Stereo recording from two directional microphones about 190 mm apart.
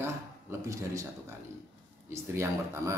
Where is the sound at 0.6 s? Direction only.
15° right (ahead or behind).